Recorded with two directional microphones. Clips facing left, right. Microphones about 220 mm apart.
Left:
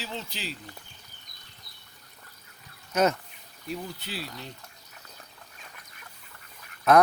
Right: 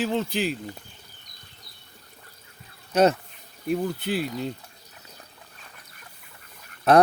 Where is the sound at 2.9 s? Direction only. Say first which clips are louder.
Right 5 dB; 30° right (ahead or behind).